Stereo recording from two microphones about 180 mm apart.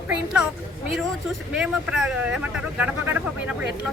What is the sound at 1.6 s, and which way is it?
Speech, centre (ahead or behind).